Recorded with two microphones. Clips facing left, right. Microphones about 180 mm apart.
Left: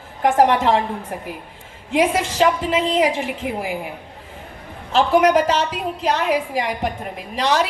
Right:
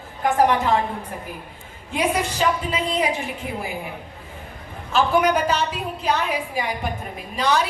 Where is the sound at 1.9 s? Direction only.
90° left.